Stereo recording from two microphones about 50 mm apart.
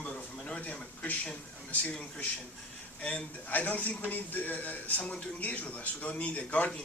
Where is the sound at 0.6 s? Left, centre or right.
Left.